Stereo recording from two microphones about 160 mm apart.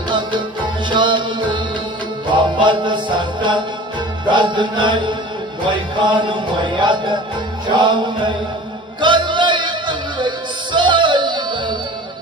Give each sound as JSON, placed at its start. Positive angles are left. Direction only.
{"t": 0.1, "sound": "music", "side_deg": -30}